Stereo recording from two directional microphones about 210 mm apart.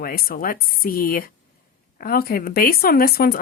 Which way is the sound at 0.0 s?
45° left (ahead or behind).